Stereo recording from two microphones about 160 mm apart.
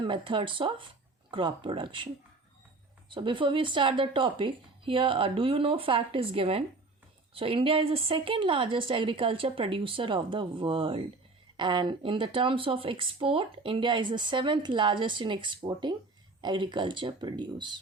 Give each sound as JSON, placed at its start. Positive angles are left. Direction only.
{"t": 0.0, "sound": "speech", "side_deg": -30}
{"t": 3.2, "sound": "speech", "side_deg": -30}